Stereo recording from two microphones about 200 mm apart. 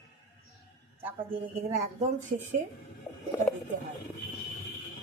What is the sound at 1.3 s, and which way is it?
Speech, 35° right (ahead or behind).